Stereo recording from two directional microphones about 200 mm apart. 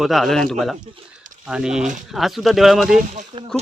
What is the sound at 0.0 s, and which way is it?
Speech, centre (ahead or behind).